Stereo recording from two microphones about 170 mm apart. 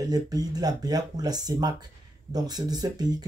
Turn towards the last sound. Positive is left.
turn(degrees=-25)  # may be behind; listen again after turning